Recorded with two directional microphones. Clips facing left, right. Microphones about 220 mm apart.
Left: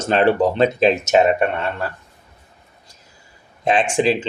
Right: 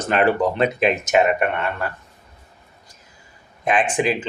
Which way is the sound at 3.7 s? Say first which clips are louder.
Left 3 dB; 25° left (ahead or behind).